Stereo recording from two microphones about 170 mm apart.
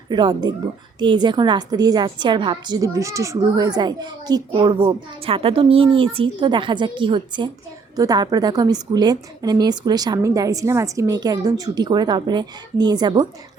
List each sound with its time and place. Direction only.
0.1 s a woman's voice: 25° right (ahead or behind)